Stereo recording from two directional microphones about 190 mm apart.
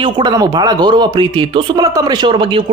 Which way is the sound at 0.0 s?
20° right (ahead or behind).